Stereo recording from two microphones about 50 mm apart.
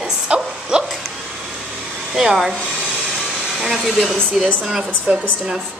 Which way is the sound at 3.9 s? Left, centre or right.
Centre.